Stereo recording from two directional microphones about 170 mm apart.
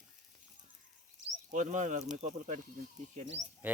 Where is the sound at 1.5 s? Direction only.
45° right (ahead or behind).